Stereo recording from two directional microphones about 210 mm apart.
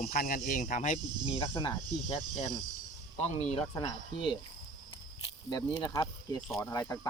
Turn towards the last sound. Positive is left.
turn(degrees=15)  # may be behind; listen again after turning